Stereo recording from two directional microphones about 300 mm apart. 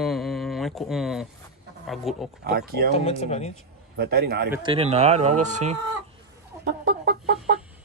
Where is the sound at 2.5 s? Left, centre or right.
Right.